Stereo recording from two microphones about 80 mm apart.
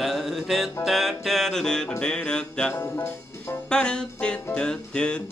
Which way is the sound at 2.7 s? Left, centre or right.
Left.